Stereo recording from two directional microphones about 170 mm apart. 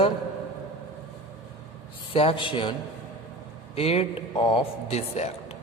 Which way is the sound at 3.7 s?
35° left (ahead or behind).